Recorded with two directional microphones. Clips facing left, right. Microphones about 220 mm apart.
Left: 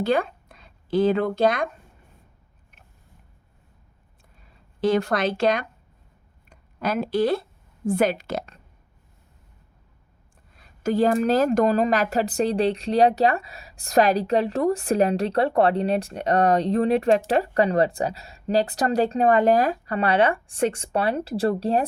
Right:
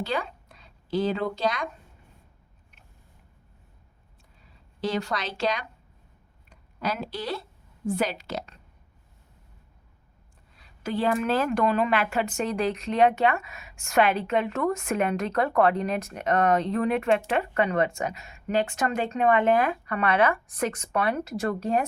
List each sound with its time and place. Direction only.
0.0 s speech: 50° left (ahead or behind)
4.8 s speech: 50° left (ahead or behind)
10.6 s a woman's voice: 45° left (ahead or behind)